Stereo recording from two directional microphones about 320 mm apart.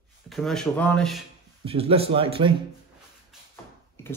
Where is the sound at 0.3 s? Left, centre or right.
Centre.